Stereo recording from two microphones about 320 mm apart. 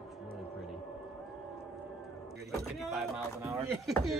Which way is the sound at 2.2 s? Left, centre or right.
Centre.